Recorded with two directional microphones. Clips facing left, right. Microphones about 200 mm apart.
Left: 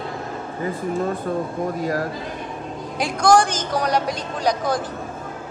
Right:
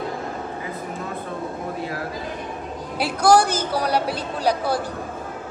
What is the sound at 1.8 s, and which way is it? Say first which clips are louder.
Speech: left 7 dB; 40° left (ahead or behind).